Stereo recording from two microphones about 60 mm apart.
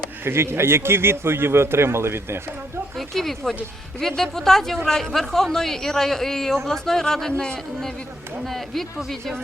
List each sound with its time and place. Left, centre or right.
0.3 s a man's voice: right
3.0 s speech: centre